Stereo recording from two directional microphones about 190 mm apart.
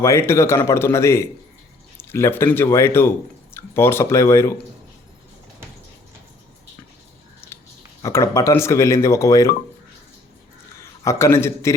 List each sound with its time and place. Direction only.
0.0 s speech: 15° left (ahead or behind)
7.4 s chewing: 10° left (ahead or behind)
8.0 s speech: 15° left (ahead or behind)
11.0 s speech: 15° left (ahead or behind)